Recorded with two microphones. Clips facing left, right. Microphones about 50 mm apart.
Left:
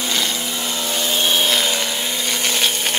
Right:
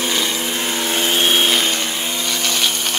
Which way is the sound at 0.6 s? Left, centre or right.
Right.